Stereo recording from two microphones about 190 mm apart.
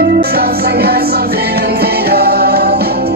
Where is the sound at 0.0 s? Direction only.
55° right (ahead or behind).